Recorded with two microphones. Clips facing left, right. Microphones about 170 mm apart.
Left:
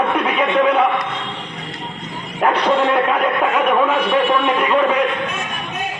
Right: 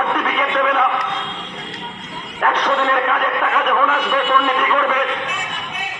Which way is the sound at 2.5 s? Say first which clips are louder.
Left 3 dB; 30° left (ahead or behind).